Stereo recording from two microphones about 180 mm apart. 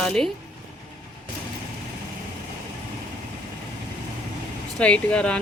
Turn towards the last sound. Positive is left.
turn(degrees=5)  # may be behind; listen again after turning